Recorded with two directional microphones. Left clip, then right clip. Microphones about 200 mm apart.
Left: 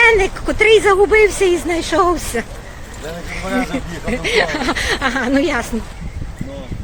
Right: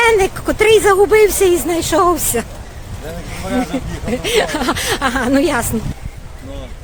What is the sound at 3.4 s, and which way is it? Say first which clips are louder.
Speech: right 1 dB; 10° right (ahead or behind).